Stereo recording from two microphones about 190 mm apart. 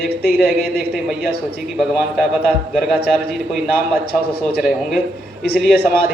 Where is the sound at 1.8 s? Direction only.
5° right (ahead or behind).